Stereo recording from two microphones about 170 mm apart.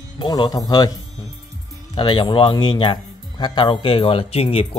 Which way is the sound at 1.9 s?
30° left (ahead or behind).